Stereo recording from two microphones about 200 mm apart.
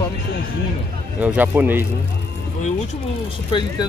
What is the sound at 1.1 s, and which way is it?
Speech, 5° right (ahead or behind).